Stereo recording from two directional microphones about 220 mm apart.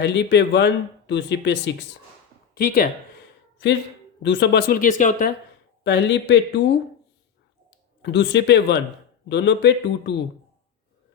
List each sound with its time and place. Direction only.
0.0 s speech: 50° left (ahead or behind)
2.6 s speech: 40° left (ahead or behind)
4.2 s speech: 50° left (ahead or behind)
5.8 s speech: 55° left (ahead or behind)
8.0 s speech: 55° left (ahead or behind)